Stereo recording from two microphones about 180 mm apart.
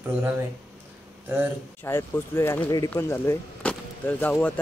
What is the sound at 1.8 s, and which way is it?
Speech, 15° left (ahead or behind).